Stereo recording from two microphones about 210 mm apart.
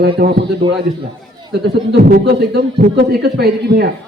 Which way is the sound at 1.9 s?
50° right (ahead or behind).